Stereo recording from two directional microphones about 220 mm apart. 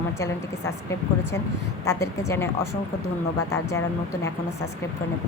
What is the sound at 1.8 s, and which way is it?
Speech, 15° left (ahead or behind).